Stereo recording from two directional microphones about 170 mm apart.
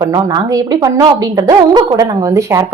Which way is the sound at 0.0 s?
20° right (ahead or behind).